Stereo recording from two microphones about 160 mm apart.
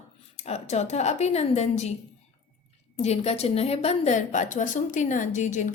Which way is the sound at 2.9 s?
40° left (ahead or behind).